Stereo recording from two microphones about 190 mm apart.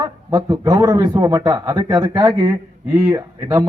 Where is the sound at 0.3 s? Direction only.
20° right (ahead or behind).